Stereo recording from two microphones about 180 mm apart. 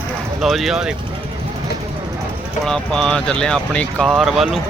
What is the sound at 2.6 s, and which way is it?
Speech, 5° left (ahead or behind).